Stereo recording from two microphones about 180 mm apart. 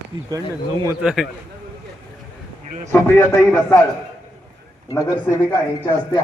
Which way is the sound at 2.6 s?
40° right (ahead or behind).